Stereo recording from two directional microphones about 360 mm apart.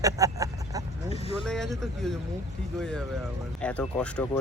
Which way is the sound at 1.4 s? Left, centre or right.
Centre.